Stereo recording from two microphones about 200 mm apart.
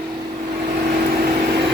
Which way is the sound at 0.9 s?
45° right (ahead or behind).